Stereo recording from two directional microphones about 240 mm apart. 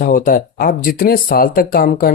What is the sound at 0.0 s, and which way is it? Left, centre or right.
Speech, left.